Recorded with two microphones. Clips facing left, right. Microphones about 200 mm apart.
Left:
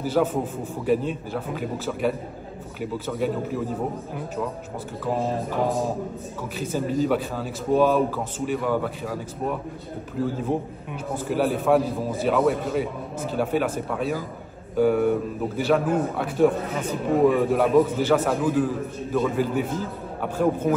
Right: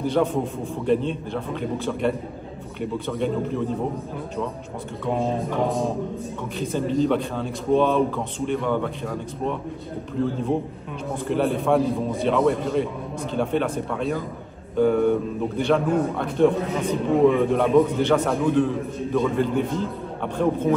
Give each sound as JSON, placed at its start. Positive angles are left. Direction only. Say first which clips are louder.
{"t": 0.0, "sound": "a man's voice", "louder": "right 1 dB", "side_deg": 5}
{"t": 5.0, "sound": "a man's voice", "louder": "right 1 dB", "side_deg": 0}